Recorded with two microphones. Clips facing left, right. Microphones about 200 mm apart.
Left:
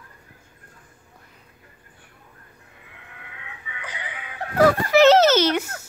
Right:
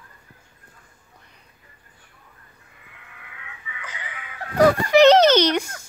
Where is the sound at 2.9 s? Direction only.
20° left (ahead or behind).